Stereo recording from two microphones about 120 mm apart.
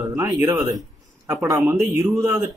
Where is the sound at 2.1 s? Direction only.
25° right (ahead or behind).